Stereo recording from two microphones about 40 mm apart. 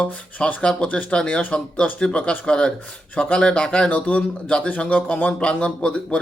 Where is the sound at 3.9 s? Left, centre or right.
Left.